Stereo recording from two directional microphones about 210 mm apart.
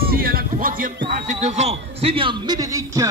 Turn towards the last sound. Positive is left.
turn(degrees=-15)  # may be behind; listen again after turning